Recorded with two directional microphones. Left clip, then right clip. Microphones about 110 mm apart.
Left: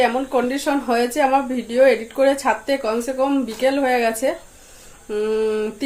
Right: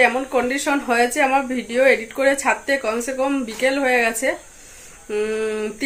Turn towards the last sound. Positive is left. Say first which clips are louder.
# left 3 dB
turn(degrees=25)  # may be behind; listen again after turning